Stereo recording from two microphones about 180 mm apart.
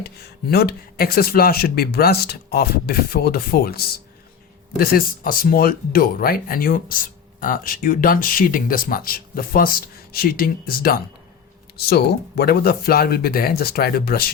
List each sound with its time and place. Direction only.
0.0 s speech: 60° left (ahead or behind)